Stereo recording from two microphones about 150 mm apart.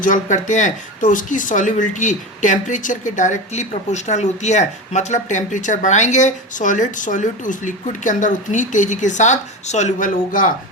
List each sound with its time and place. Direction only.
0.0 s speech: 55° left (ahead or behind)